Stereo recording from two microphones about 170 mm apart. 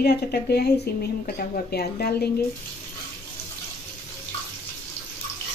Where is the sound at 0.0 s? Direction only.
70° left (ahead or behind).